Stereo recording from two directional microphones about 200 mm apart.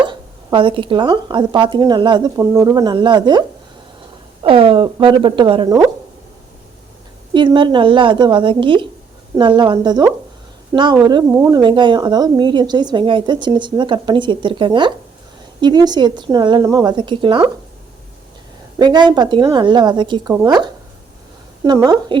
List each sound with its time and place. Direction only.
0.0 s speech: 25° right (ahead or behind)
4.4 s speech: 25° right (ahead or behind)
7.3 s speech: 25° right (ahead or behind)
11.6 s speech: 25° right (ahead or behind)
18.8 s speech: 20° right (ahead or behind)